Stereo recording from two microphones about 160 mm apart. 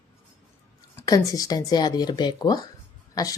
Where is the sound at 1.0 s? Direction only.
20° left (ahead or behind).